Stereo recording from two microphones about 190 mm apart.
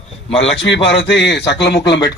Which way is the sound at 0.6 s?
70° left (ahead or behind).